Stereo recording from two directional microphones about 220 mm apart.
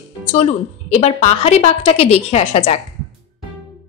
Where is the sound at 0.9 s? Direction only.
30° left (ahead or behind).